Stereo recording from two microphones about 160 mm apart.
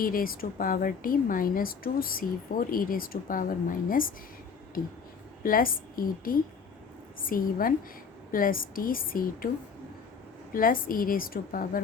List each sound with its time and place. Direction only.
0.0 s speech: 65° left (ahead or behind)
5.4 s speech: 65° left (ahead or behind)
10.5 s speech: 60° left (ahead or behind)